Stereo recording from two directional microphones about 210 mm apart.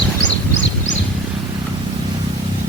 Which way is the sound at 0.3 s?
60° left (ahead or behind).